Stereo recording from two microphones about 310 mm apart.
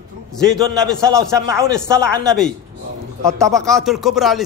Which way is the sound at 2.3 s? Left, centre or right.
Centre.